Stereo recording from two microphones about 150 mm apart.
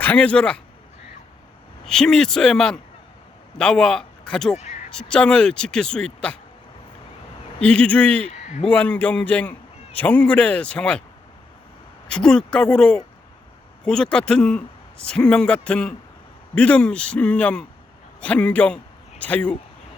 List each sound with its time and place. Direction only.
0.0 s a man's voice: 10° left (ahead or behind)
1.8 s speech: 5° left (ahead or behind)
4.5 s a sound: 50° left (ahead or behind)
4.9 s speech: 5° left (ahead or behind)
7.6 s a man's voice: 5° left (ahead or behind)
8.3 s a sound: 50° left (ahead or behind)
8.7 s a man's voice: 10° left (ahead or behind)
12.0 s a man's voice: 5° left (ahead or behind)